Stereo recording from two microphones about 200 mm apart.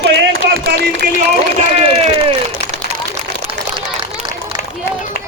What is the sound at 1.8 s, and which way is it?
Speech, 30° right (ahead or behind).